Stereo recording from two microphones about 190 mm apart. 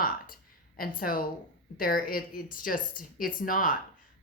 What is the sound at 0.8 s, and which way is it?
A woman's voice, 50° left (ahead or behind).